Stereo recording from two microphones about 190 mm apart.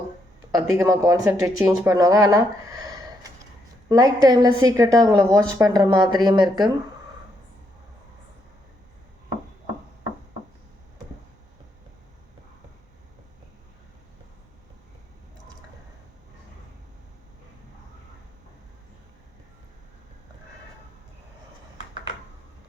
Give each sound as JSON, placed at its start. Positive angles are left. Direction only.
{"t": 0.5, "sound": "a woman's voice", "side_deg": -15}